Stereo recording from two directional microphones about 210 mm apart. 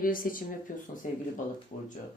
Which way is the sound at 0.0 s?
40° left (ahead or behind).